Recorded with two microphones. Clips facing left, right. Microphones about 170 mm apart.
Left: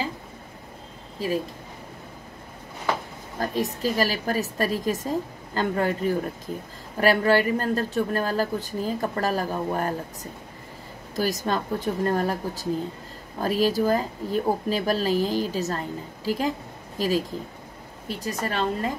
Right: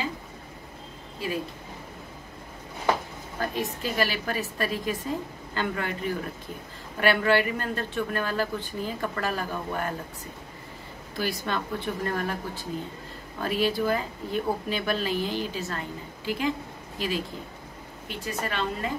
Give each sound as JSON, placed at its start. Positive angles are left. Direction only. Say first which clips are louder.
{"t": 3.3, "sound": "a woman's voice", "louder": "left 3 dB", "side_deg": 40}
{"t": 11.1, "sound": "a woman's voice", "louder": "left 4 dB", "side_deg": 40}